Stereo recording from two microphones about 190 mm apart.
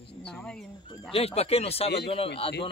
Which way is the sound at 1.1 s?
30° left (ahead or behind).